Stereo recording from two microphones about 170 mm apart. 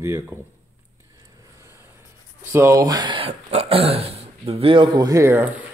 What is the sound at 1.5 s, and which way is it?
Vehicle, 15° right (ahead or behind).